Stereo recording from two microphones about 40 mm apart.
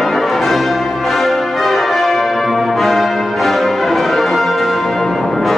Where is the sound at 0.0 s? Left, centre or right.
Centre.